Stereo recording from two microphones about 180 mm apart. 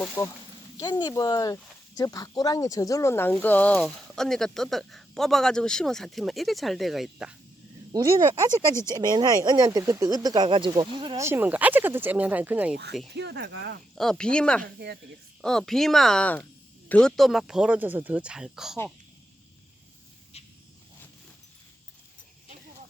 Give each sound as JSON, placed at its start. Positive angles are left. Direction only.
{"t": 0.0, "sound": "speech", "side_deg": 20}
{"t": 7.9, "sound": "speech", "side_deg": -20}
{"t": 11.2, "sound": "speech", "side_deg": -10}
{"t": 13.1, "sound": "speech", "side_deg": -70}
{"t": 13.9, "sound": "speech", "side_deg": 0}
{"t": 14.6, "sound": "speech", "side_deg": -65}
{"t": 15.4, "sound": "speech", "side_deg": 0}
{"t": 20.3, "sound": "a sound", "side_deg": 35}